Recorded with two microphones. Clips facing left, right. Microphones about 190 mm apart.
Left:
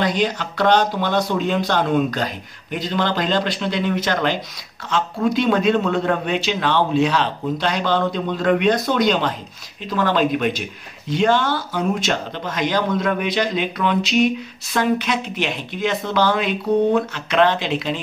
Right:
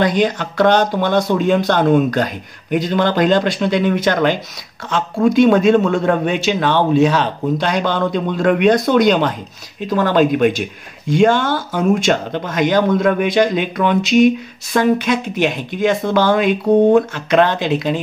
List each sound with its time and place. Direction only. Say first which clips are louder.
0.0 s speech: right 5 dB; 50° right (ahead or behind)